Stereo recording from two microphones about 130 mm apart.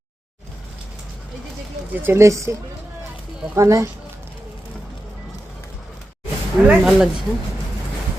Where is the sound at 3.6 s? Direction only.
25° right (ahead or behind).